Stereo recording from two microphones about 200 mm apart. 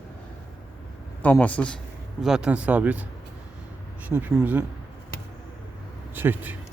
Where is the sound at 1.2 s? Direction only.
10° left (ahead or behind); by 3.0 s 10° right (ahead or behind).